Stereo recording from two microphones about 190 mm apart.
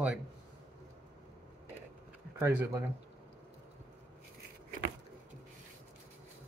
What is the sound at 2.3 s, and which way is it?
Speech, 15° right (ahead or behind).